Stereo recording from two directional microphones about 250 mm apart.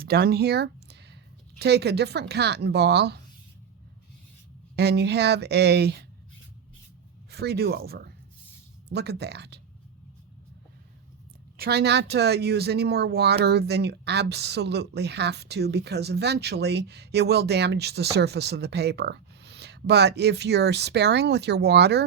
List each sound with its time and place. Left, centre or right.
0.0 s speech: right
4.8 s speech: right
7.3 s speech: right
11.5 s speech: right